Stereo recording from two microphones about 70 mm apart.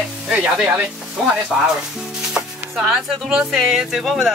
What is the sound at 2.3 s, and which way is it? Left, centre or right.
Speech, centre.